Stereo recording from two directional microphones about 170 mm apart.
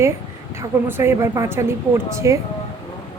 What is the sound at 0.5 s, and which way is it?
Speech, 15° right (ahead or behind).